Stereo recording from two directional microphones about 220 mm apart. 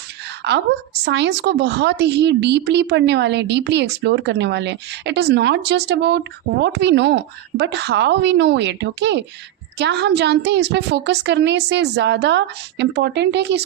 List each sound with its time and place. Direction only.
1.0 s a woman's voice: 50° right (ahead or behind)